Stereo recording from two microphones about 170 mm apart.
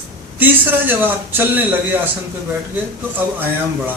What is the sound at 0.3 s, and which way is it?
A man's voice, 10° right (ahead or behind).